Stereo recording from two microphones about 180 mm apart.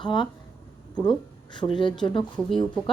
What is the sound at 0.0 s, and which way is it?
A woman's voice, 25° left (ahead or behind).